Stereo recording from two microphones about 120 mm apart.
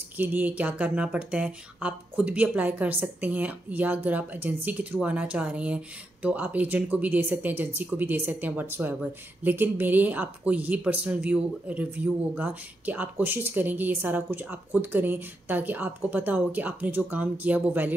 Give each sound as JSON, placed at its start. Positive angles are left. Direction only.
{"t": 0.2, "sound": "speech", "side_deg": -15}